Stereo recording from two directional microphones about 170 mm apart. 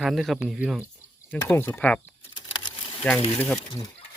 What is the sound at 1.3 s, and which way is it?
Speech, 10° left (ahead or behind).